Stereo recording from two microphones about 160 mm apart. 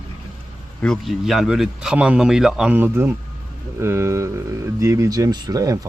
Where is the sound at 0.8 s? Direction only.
Centre (ahead or behind).